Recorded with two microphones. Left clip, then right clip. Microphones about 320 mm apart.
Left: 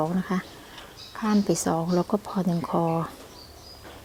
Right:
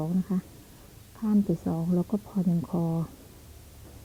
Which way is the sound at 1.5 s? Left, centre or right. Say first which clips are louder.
Left 6 dB; centre.